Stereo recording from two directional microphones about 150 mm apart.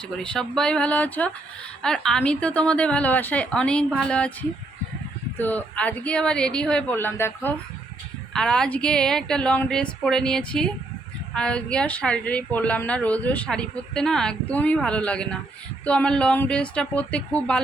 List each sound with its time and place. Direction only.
0.2 s a woman's voice: 5° left (ahead or behind)
5.4 s a woman's voice: 10° left (ahead or behind)
8.3 s a woman's voice: 5° left (ahead or behind)